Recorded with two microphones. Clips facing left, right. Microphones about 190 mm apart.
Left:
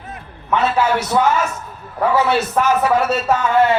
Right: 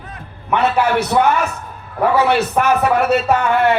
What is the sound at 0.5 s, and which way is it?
A man's voice, 60° right (ahead or behind).